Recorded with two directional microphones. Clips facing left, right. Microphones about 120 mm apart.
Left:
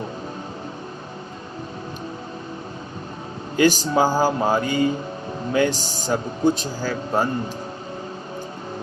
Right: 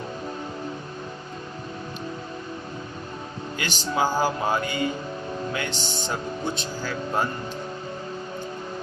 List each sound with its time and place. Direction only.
3.6 s speech: 35° left (ahead or behind)